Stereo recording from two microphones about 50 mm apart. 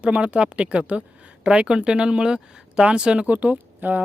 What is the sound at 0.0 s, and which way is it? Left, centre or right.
Speech, right.